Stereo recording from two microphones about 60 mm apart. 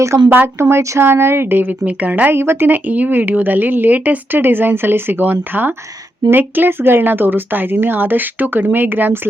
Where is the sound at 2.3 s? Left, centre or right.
Right.